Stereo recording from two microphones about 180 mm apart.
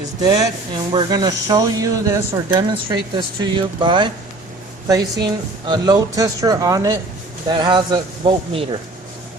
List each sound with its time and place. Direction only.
0.2 s speech: 25° right (ahead or behind)